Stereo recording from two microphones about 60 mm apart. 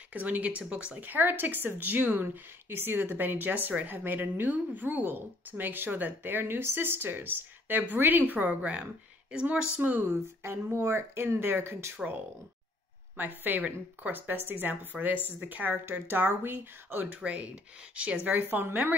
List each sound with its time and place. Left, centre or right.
0.1 s speech: right
0.9 s a woman's voice: right; by 9.7 s centre
9.8 s speech: right
10.0 s speech: right
13.1 s a woman's voice: right